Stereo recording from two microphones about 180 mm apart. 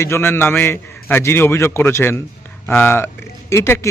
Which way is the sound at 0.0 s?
15° left (ahead or behind).